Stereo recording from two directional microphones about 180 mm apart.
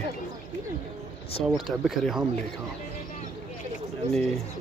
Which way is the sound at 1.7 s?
Centre (ahead or behind).